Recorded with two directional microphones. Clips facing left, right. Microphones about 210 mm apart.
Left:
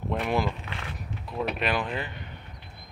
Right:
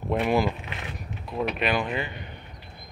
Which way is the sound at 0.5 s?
15° right (ahead or behind).